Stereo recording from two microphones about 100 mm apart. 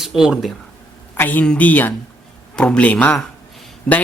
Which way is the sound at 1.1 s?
20° left (ahead or behind).